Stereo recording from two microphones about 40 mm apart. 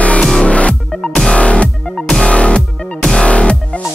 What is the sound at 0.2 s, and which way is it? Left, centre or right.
Music, centre.